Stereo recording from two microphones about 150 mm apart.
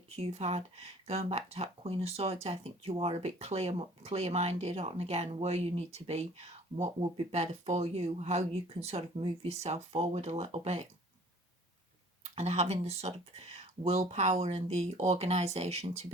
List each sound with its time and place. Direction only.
0.1 s speech: 45° right (ahead or behind)
12.2 s speech: 45° right (ahead or behind)